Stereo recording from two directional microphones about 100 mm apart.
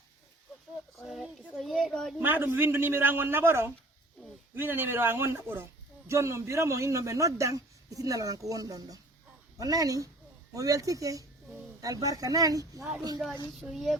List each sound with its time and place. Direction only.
0.9 s speech: centre (ahead or behind)
2.1 s a man's voice: 20° right (ahead or behind); by 13.2 s 40° right (ahead or behind)
13.7 s speech: centre (ahead or behind)